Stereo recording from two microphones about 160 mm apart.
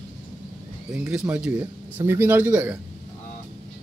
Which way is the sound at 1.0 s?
10° right (ahead or behind).